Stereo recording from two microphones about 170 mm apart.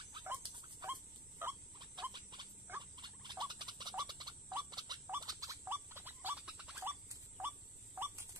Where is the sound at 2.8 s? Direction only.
25° right (ahead or behind).